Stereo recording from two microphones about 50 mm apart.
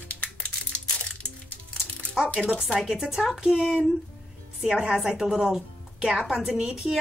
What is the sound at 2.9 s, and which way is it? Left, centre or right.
A woman's voice, centre.